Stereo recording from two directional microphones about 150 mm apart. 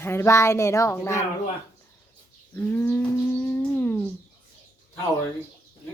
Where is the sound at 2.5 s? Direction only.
15° left (ahead or behind).